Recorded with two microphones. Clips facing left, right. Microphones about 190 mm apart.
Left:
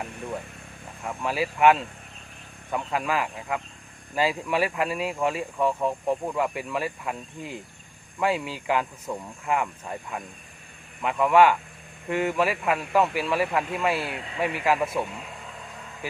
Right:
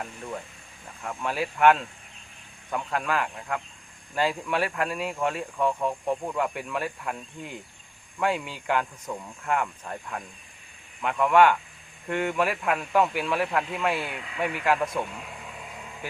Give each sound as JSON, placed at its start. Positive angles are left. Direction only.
{"t": 1.0, "sound": "speech", "side_deg": 5}
{"t": 14.0, "sound": "speech", "side_deg": 35}
{"t": 14.6, "sound": "speech", "side_deg": 5}